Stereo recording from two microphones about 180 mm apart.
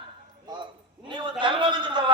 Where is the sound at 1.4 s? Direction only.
25° right (ahead or behind).